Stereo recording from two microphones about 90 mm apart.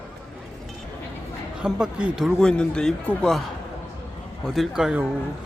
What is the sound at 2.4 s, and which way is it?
Speech, 10° left (ahead or behind).